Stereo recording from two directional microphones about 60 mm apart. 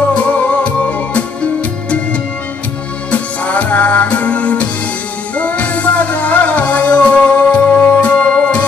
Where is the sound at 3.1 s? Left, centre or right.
Left.